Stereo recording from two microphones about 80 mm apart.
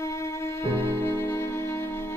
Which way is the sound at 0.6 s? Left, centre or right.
Left.